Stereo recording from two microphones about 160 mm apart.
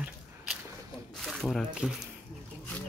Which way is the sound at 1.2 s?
Centre (ahead or behind).